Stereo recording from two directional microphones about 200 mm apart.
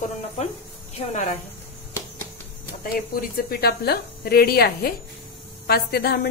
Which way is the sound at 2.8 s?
45° left (ahead or behind).